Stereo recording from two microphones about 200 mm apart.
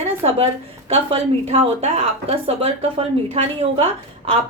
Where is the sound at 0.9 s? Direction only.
30° right (ahead or behind).